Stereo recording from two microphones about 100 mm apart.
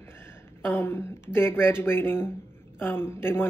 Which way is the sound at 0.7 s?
25° left (ahead or behind).